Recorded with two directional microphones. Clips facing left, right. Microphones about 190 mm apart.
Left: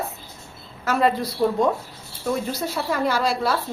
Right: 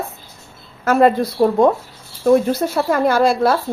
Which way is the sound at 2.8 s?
50° right (ahead or behind).